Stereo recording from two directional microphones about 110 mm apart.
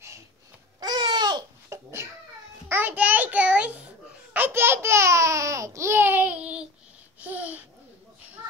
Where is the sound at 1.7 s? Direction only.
25° right (ahead or behind).